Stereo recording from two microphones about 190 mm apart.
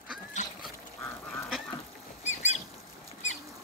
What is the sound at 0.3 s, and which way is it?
Duck, 40° left (ahead or behind).